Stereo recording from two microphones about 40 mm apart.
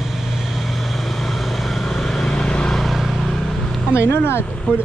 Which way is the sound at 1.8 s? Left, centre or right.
Centre.